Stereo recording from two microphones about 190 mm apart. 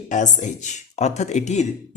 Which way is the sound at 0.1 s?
40° left (ahead or behind).